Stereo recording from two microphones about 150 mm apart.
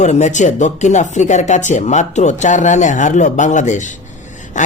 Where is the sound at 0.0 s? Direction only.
50° left (ahead or behind).